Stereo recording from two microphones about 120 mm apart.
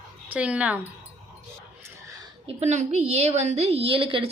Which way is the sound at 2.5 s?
65° right (ahead or behind).